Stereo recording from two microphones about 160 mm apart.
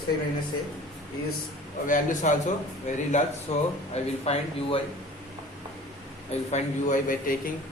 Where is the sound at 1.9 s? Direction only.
55° left (ahead or behind); by 4.8 s 40° left (ahead or behind).